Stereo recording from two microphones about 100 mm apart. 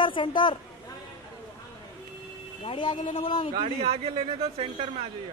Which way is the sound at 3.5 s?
60° right (ahead or behind).